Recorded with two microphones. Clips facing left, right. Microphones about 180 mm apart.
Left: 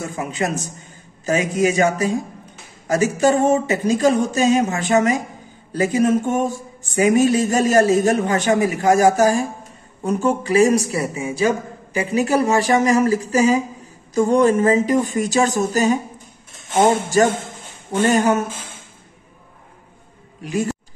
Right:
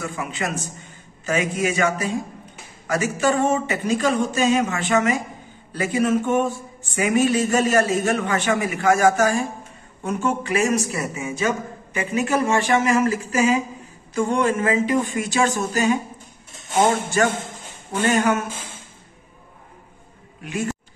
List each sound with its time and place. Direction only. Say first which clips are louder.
0.0 s speech: left 4 dB; 40° left (ahead or behind)
20.4 s speech: left 4 dB; 35° left (ahead or behind)